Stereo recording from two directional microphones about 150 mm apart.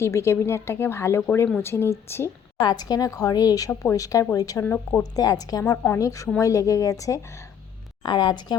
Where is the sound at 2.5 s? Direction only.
25° left (ahead or behind).